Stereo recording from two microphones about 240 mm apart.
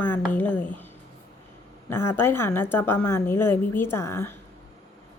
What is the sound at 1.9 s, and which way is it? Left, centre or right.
Speech, centre.